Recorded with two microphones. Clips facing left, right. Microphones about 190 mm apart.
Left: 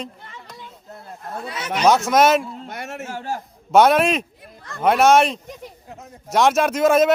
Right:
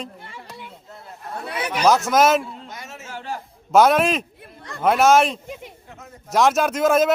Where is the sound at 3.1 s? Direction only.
45° left (ahead or behind).